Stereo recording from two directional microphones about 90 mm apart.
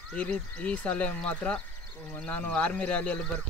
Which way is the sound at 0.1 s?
10° left (ahead or behind).